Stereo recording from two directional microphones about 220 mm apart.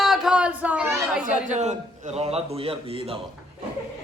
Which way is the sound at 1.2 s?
30° right (ahead or behind).